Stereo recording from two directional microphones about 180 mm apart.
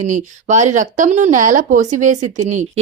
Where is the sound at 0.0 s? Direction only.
40° right (ahead or behind).